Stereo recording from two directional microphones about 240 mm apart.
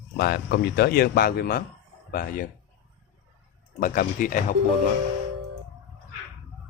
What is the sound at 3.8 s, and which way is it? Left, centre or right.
Speech, left.